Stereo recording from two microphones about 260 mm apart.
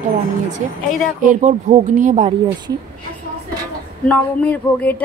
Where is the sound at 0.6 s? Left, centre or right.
Right.